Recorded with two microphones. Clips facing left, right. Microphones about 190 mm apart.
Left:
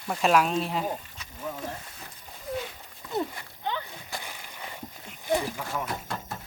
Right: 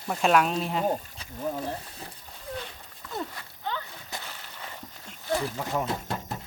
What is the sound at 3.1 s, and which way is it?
Horse, 20° left (ahead or behind).